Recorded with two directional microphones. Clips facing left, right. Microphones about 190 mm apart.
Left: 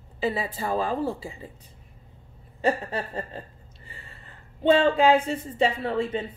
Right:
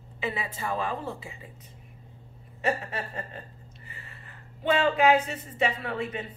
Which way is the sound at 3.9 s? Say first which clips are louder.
Left 2 dB; 30° left (ahead or behind).